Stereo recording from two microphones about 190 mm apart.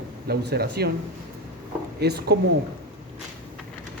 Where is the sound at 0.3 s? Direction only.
55° right (ahead or behind).